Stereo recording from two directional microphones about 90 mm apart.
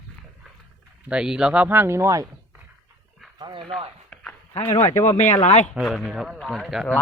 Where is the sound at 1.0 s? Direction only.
10° right (ahead or behind); by 2.2 s 35° right (ahead or behind).